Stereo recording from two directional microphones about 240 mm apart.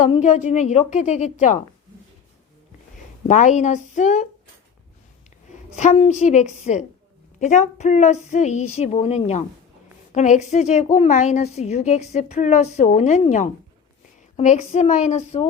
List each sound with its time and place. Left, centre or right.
0.0 s a woman's voice: left
3.2 s speech: left
5.5 s a woman's voice: left